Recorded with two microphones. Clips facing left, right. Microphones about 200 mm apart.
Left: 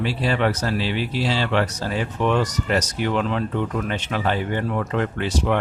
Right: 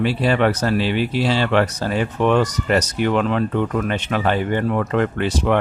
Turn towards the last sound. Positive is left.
turn(degrees=-60)  # may be behind; listen again after turning